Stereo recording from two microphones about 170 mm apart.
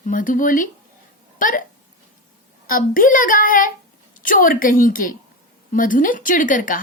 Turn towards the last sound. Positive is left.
turn(degrees=50)  # may be behind; listen again after turning